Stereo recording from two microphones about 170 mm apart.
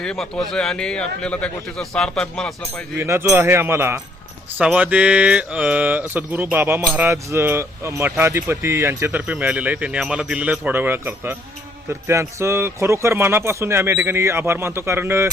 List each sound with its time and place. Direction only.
0.0 s a man's voice: 5° left (ahead or behind)
3.0 s mantra: 15° right (ahead or behind)